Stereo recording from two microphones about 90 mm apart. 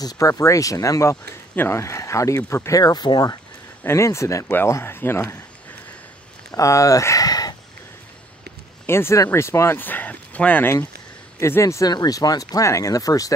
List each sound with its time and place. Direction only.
0.0 s speech: 40° left (ahead or behind)
1.5 s speech: 25° left (ahead or behind)
2.8 s speech: 50° left (ahead or behind)
3.8 s speech: 30° left (ahead or behind)
6.5 s speech: 35° left (ahead or behind)
8.8 s speech: 30° left (ahead or behind)
11.3 s speech: 30° left (ahead or behind)
11.9 s speech: 45° left (ahead or behind)